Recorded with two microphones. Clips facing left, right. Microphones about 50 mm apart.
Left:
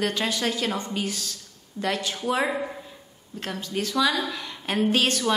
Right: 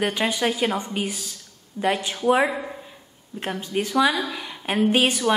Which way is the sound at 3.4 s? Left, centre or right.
Right.